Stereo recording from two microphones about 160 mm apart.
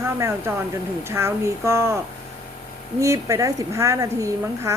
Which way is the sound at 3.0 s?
20° right (ahead or behind).